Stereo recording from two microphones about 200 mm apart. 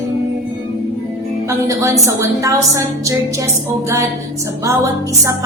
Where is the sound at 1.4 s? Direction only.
15° right (ahead or behind).